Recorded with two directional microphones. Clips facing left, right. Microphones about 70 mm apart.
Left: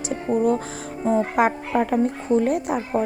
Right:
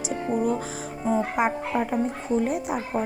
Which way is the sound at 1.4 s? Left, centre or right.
Left.